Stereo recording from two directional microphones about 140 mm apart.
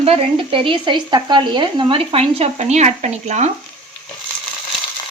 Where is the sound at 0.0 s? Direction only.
40° right (ahead or behind).